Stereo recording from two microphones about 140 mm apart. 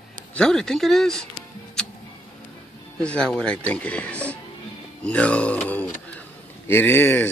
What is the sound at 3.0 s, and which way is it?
Speech, 5° left (ahead or behind).